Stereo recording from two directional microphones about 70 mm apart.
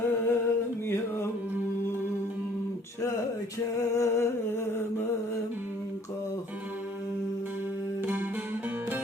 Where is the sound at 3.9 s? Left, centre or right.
Left.